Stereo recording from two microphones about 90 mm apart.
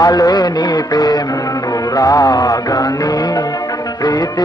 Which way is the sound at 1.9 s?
40° left (ahead or behind).